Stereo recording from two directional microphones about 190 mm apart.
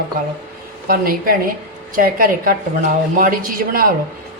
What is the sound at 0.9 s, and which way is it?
A woman's voice, 50° right (ahead or behind).